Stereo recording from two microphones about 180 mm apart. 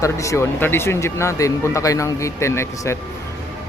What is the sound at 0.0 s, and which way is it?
Speech, 15° left (ahead or behind).